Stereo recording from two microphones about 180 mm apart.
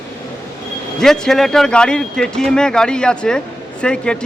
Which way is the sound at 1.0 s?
Centre (ahead or behind).